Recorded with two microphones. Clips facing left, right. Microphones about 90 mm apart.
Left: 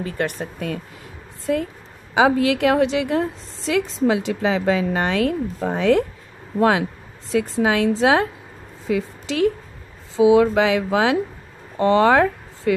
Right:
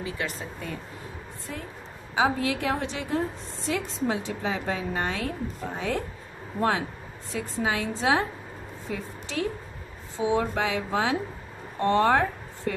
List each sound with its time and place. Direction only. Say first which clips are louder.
0.0 s speech: left 7 dB; 60° left (ahead or behind)
1.4 s a woman's voice: left 17 dB; 90° left
7.2 s a woman's voice: left 9 dB; 90° left